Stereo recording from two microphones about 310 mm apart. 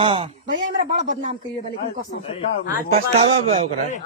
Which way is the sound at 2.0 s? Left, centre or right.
Centre.